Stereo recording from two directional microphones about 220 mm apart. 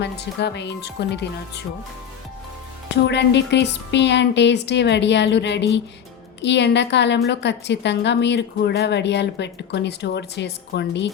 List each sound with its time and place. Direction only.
0.0 s a woman's voice: 50° left (ahead or behind)
3.1 s a woman's voice: 50° left (ahead or behind)